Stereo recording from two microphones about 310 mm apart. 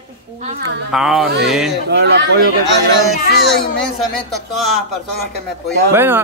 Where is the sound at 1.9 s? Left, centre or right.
Right.